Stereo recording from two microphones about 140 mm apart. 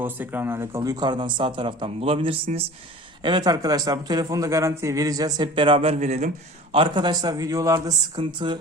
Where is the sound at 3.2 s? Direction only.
30° right (ahead or behind); by 6.3 s 55° right (ahead or behind).